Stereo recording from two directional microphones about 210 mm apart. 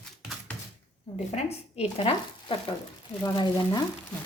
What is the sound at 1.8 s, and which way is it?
Speech, 25° left (ahead or behind).